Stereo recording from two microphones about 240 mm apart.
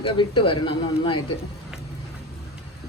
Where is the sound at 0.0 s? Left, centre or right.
Left.